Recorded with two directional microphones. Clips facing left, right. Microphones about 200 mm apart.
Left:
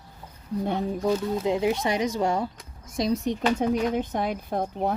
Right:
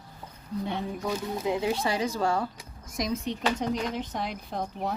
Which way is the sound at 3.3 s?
55° left (ahead or behind).